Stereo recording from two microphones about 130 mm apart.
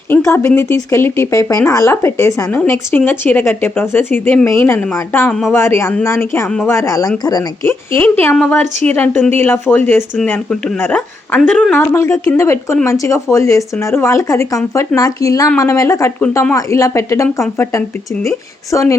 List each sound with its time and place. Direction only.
0.1 s speech: 20° left (ahead or behind)
11.3 s a woman's voice: 5° left (ahead or behind)
11.9 s speech: 25° left (ahead or behind)